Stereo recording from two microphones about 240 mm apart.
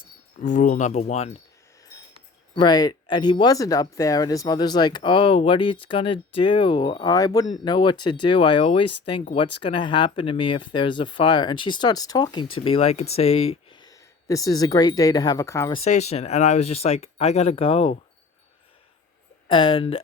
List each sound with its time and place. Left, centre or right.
0.4 s speech: left
2.6 s speech: centre
15.8 s speech: left
19.5 s speech: left